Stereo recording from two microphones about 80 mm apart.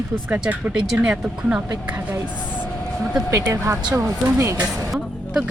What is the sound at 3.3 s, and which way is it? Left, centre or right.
A woman's voice, right.